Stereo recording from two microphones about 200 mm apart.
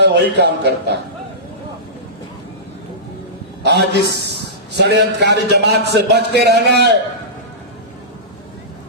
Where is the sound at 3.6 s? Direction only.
55° right (ahead or behind).